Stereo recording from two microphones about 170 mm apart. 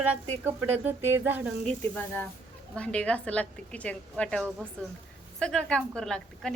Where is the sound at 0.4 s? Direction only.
10° right (ahead or behind).